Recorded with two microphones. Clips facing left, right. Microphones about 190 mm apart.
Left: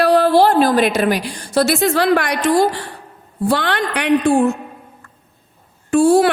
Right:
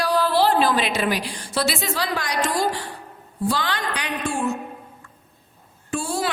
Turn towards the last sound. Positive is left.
turn(degrees=60)  # may be behind; listen again after turning